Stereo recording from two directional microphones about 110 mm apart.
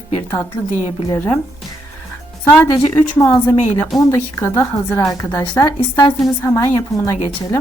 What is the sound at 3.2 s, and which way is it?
A woman's voice, 30° left (ahead or behind).